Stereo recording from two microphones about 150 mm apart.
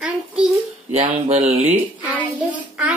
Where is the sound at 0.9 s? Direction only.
45° right (ahead or behind).